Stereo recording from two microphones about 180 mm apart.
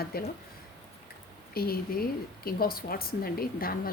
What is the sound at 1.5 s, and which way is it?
Speech, 55° left (ahead or behind).